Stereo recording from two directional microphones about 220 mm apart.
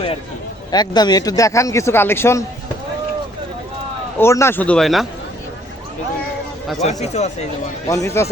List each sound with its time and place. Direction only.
0.7 s a man's voice: 20° left (ahead or behind)
4.2 s a man's voice: 10° left (ahead or behind)
6.8 s speech: 30° left (ahead or behind)
7.9 s a man's voice: 15° left (ahead or behind)